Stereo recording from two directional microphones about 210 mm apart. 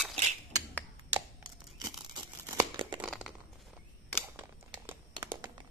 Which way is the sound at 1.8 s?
20° right (ahead or behind).